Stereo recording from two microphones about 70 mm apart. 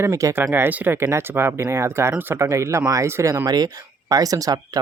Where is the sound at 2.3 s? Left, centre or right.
Right.